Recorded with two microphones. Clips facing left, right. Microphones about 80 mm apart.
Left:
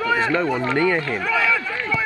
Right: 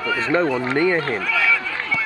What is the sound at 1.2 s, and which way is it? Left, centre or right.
Run, left.